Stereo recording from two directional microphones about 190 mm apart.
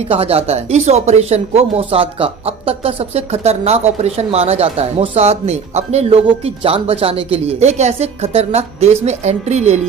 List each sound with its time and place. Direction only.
0.1 s speech: 30° right (ahead or behind)